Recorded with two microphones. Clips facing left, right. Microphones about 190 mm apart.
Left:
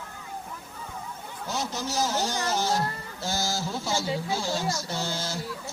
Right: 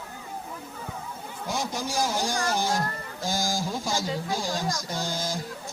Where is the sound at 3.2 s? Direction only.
15° right (ahead or behind).